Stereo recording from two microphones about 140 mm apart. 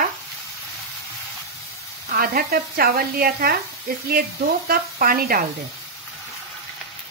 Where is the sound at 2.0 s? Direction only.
90° right.